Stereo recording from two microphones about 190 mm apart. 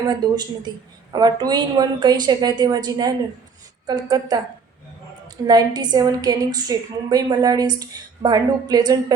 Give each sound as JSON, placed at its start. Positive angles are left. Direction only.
{"t": 0.1, "sound": "a woman's voice", "side_deg": -20}
{"t": 5.5, "sound": "a woman's voice", "side_deg": -20}